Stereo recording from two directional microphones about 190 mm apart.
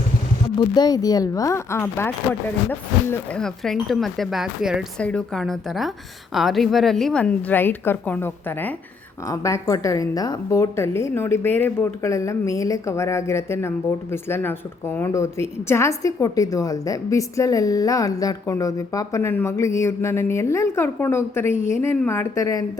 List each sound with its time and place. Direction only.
0.6 s a woman's voice: 20° left (ahead or behind)